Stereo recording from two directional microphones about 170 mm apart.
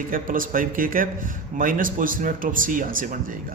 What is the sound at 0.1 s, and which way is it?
A man's voice, 55° right (ahead or behind).